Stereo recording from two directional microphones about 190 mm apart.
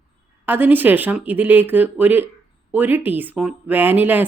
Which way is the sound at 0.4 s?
10° right (ahead or behind).